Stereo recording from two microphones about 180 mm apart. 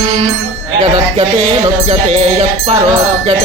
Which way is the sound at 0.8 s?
35° right (ahead or behind).